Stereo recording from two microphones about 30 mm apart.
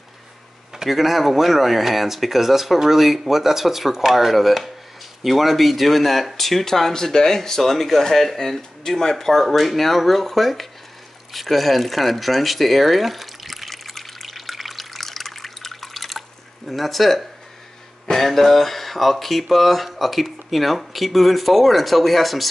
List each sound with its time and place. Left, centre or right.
0.8 s speech: centre
6.6 s speech: centre
11.3 s a sound: centre
18.1 s speech: centre